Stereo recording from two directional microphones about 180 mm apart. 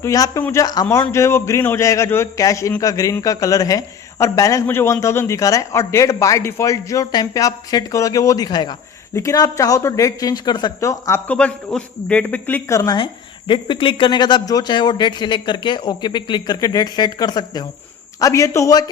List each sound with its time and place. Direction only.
0.0 s a man's voice: 20° left (ahead or behind)